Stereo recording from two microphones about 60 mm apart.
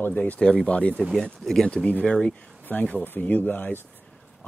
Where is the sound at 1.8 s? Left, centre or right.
Left.